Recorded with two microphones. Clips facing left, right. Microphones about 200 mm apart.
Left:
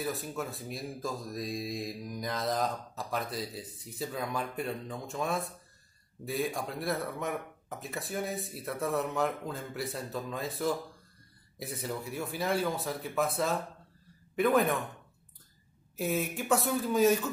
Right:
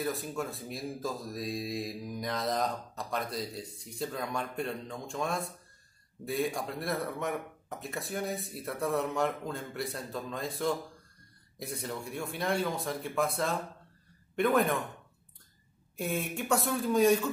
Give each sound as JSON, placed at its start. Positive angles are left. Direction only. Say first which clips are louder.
{"t": 0.0, "sound": "speech", "louder": "right 1 dB", "side_deg": 0}
{"t": 16.0, "sound": "speech", "louder": "left 2 dB", "side_deg": 0}